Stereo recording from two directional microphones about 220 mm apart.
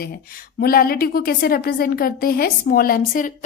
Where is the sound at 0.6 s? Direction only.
45° left (ahead or behind).